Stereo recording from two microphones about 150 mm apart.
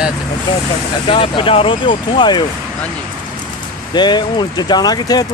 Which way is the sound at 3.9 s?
30° left (ahead or behind).